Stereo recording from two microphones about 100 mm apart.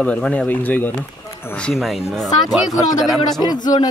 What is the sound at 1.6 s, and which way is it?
Speech, centre (ahead or behind).